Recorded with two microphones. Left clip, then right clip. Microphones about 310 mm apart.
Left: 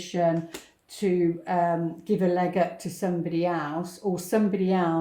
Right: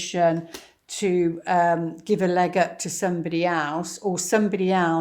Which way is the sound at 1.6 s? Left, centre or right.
Right.